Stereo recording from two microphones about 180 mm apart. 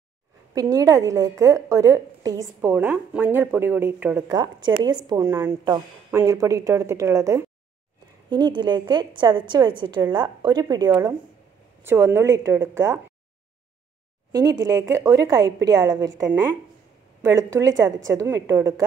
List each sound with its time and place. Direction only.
0.6 s a woman's voice: 20° right (ahead or behind)
4.4 s a woman's voice: 25° right (ahead or behind)
14.3 s a woman's voice: 20° right (ahead or behind)
17.3 s a woman's voice: 15° right (ahead or behind)